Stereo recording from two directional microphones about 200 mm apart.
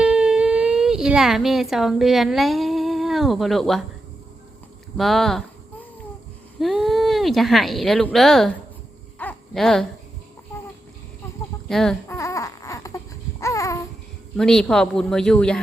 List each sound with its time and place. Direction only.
0.0 s a sound: 5° right (ahead or behind)
4.9 s speech: centre (ahead or behind)
6.6 s speech: centre (ahead or behind)
9.1 s a sound: 5° left (ahead or behind)
11.7 s speech: centre (ahead or behind)
12.0 s baby cry: 15° left (ahead or behind)
13.4 s babbling: 15° left (ahead or behind)
14.3 s speech: 5° left (ahead or behind)